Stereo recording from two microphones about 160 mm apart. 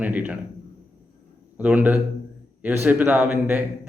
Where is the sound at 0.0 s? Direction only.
10° right (ahead or behind).